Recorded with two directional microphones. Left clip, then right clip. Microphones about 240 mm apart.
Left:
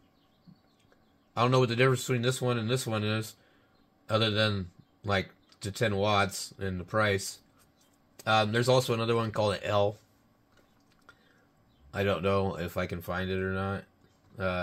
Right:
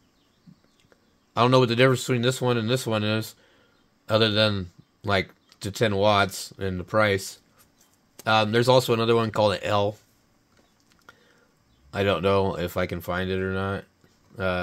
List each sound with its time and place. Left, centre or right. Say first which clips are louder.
1.3 s speech: right 6 dB; right
8.2 s speech: right 5 dB; right
11.1 s a sound: right 6 dB; right
11.9 s speech: right 6 dB; right